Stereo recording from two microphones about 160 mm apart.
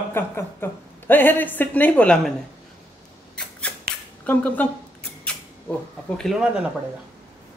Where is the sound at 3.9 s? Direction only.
70° right (ahead or behind).